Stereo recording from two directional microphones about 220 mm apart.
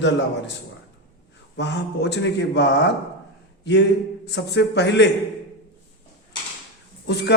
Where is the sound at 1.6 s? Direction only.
50° left (ahead or behind).